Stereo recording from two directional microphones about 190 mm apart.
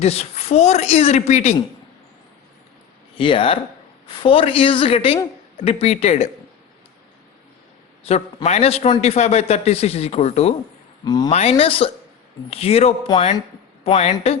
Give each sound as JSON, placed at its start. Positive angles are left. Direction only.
{"t": 0.0, "sound": "a man's voice", "side_deg": 35}
{"t": 3.2, "sound": "a man's voice", "side_deg": 25}
{"t": 8.1, "sound": "a man's voice", "side_deg": 30}
{"t": 11.0, "sound": "speech", "side_deg": 20}
{"t": 11.3, "sound": "a man's voice", "side_deg": 35}